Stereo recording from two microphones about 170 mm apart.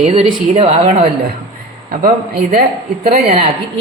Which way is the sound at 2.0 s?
60° right (ahead or behind).